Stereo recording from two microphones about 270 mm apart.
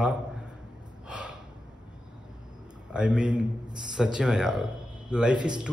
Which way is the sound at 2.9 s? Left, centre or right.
Centre.